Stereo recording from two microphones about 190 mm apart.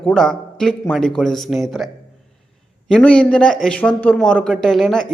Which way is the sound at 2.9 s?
5° left (ahead or behind).